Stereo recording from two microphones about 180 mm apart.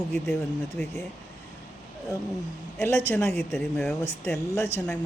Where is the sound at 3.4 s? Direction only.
Centre (ahead or behind).